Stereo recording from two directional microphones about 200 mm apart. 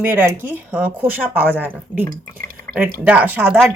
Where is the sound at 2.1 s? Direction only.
45° right (ahead or behind).